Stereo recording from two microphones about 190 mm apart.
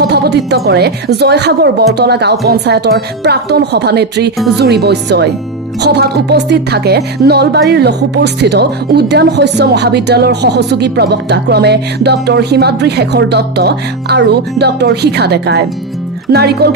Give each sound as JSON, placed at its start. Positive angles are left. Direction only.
{"t": 0.0, "sound": "a woman's voice", "side_deg": -60}